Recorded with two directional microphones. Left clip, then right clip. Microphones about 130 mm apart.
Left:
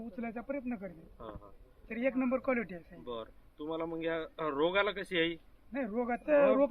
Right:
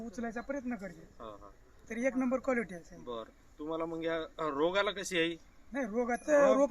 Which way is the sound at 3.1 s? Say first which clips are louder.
Even; 15° right (ahead or behind).